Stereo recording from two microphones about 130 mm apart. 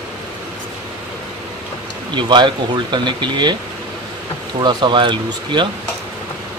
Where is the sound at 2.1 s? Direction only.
35° right (ahead or behind).